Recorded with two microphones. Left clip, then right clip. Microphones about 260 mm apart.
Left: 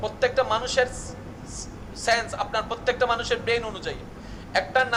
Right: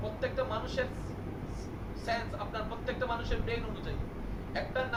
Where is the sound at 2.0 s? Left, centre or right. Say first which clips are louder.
Left 12 dB; left.